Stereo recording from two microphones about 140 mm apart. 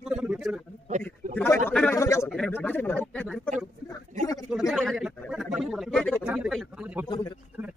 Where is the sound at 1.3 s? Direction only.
15° left (ahead or behind).